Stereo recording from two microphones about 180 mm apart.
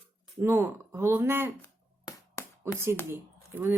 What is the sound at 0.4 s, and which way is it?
Speech, 15° right (ahead or behind).